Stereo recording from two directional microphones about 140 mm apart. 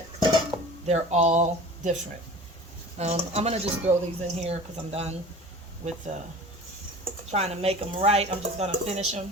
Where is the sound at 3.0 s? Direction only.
50° right (ahead or behind).